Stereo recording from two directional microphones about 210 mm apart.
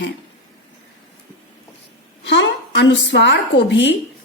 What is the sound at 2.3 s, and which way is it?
A woman's voice, 60° left (ahead or behind).